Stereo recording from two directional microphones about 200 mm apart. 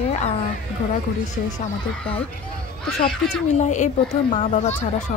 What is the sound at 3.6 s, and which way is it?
Speech, 35° left (ahead or behind).